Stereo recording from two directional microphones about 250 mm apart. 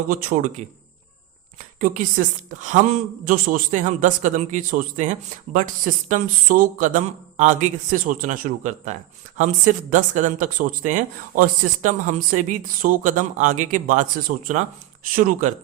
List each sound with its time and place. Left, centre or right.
0.1 s a woman's voice: right